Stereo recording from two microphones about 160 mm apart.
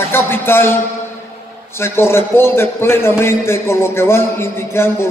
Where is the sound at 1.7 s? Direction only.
15° left (ahead or behind).